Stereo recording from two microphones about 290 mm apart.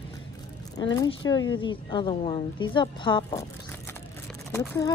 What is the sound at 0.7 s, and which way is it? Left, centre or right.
Speech, centre.